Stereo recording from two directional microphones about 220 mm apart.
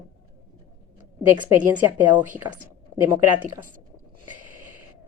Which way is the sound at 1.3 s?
10° right (ahead or behind).